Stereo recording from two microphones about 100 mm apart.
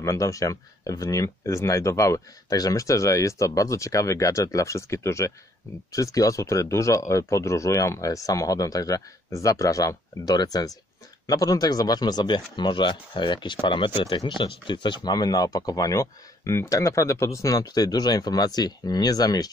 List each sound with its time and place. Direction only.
0.0 s speech: 30° left (ahead or behind)